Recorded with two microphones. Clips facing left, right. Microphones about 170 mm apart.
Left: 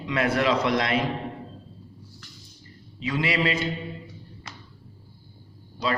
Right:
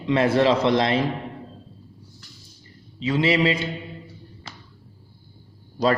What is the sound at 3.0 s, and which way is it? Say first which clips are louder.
Speech: right 5 dB; 25° right (ahead or behind).